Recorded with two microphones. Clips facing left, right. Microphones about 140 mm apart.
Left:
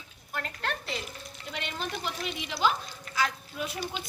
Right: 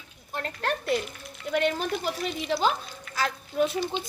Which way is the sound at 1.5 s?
50° right (ahead or behind).